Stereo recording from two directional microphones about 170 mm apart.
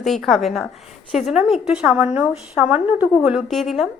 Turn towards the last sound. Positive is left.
turn(degrees=0)  # may be behind; listen again after turning